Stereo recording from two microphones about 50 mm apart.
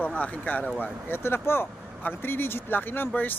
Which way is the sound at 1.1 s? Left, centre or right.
Left.